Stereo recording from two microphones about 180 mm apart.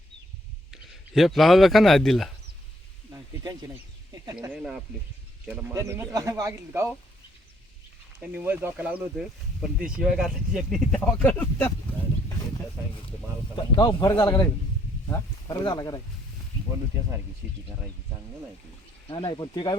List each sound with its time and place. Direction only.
0.7 s speech: centre (ahead or behind)
3.4 s speech: 20° right (ahead or behind)
4.5 s speech: 5° right (ahead or behind)
8.2 s speech: 10° right (ahead or behind); by 11.7 s 10° left (ahead or behind)
13.6 s speech: 25° left (ahead or behind)
17.4 s speech: 10° right (ahead or behind)
19.0 s speech: 25° left (ahead or behind)